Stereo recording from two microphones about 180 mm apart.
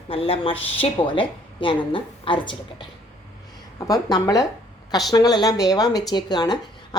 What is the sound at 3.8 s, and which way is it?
Speech, 20° left (ahead or behind).